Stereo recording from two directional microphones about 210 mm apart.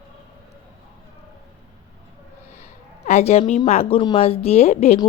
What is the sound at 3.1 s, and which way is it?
A woman's voice, 30° left (ahead or behind).